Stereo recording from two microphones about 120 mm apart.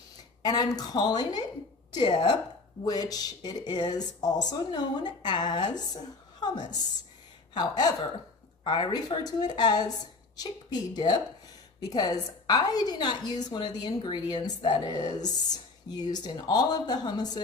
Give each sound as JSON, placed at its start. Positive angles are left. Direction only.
{"t": 0.4, "sound": "a woman's voice", "side_deg": 35}